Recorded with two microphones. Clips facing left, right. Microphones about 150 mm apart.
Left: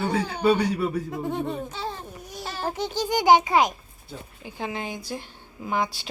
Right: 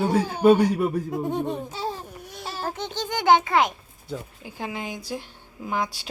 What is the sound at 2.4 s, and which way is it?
Babbling, 5° right (ahead or behind).